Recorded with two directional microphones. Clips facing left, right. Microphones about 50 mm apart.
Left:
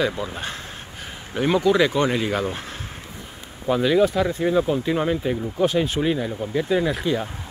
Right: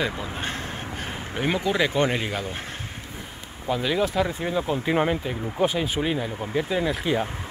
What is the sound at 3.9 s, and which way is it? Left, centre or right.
Speech, centre.